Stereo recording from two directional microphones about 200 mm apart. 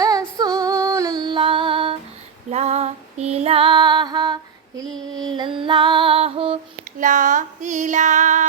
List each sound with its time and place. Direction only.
0.0 s female singing: 15° right (ahead or behind)
4.9 s female singing: centre (ahead or behind)
5.4 s female singing: 25° right (ahead or behind)
7.0 s music: 40° right (ahead or behind)